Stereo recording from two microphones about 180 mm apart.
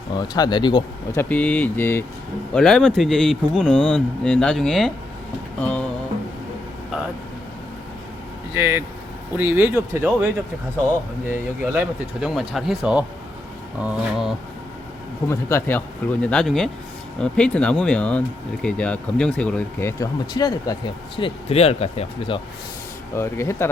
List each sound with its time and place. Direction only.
0.1 s speech: 25° left (ahead or behind)
1.2 s speech: 10° left (ahead or behind)
8.5 s speech: 15° right (ahead or behind)
15.3 s speech: 15° left (ahead or behind)
21.2 s speech: 30° left (ahead or behind)
23.1 s speech: 15° left (ahead or behind)